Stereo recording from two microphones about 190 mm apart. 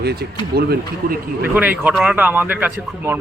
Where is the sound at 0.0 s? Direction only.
60° right (ahead or behind).